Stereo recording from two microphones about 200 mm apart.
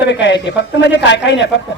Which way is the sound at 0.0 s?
60° left (ahead or behind).